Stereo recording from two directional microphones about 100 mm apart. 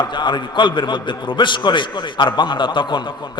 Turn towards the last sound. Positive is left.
turn(degrees=50)  # may be behind; listen again after turning